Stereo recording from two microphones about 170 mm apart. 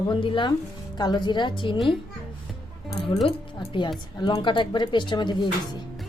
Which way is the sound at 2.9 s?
20° left (ahead or behind).